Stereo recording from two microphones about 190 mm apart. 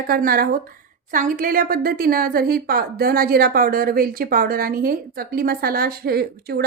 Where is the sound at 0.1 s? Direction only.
50° right (ahead or behind).